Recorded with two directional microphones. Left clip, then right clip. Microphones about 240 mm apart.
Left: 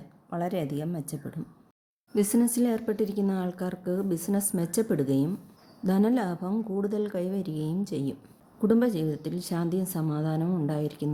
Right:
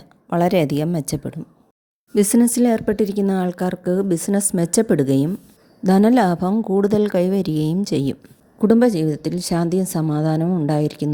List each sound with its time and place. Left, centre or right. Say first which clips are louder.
0.3 s speech: right 13 dB; right